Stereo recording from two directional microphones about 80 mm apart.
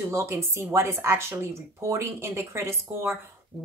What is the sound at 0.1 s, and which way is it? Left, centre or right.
Speech, right.